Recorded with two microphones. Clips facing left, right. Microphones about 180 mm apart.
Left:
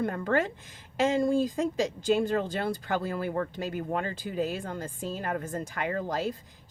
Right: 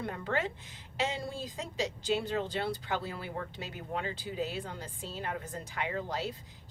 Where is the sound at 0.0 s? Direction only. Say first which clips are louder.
Left 6 dB; 50° left (ahead or behind).